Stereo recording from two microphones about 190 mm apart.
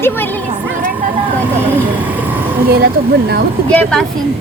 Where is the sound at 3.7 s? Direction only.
5° left (ahead or behind).